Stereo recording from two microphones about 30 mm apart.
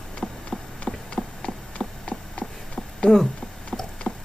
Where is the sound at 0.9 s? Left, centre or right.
Left.